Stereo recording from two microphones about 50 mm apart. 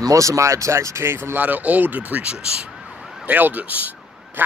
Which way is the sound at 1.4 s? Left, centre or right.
Right.